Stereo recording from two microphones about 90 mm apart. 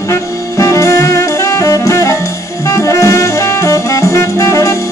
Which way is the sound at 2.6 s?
35° left (ahead or behind).